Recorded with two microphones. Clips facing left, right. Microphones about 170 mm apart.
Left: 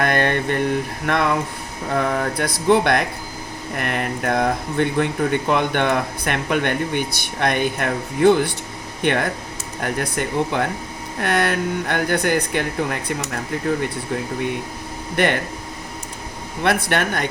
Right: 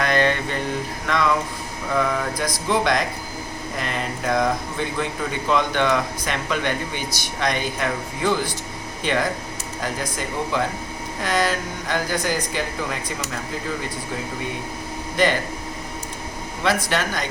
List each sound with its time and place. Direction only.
0.0 s a sound: 55° left (ahead or behind)
1.9 s speech: 55° left (ahead or behind)
15.1 s speech: 60° left (ahead or behind)
16.6 s speech: 60° left (ahead or behind)